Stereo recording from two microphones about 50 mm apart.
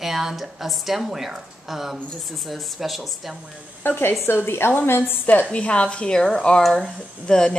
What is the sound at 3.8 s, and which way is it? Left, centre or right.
A woman's voice, left.